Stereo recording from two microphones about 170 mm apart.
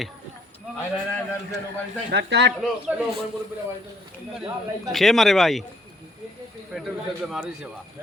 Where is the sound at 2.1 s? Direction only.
90° right.